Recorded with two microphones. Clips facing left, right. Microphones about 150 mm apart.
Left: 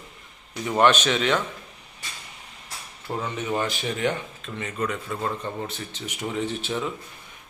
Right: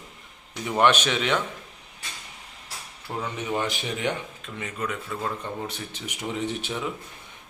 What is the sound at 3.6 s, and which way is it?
Speech, 15° right (ahead or behind).